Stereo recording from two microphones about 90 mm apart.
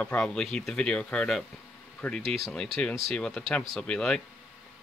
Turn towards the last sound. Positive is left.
turn(degrees=10)  # may be behind; listen again after turning